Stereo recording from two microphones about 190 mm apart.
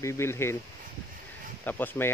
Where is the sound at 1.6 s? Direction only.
10° left (ahead or behind).